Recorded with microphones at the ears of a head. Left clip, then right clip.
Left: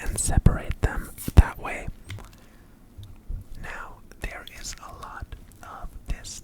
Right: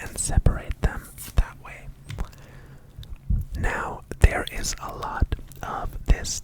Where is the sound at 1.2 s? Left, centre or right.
Left.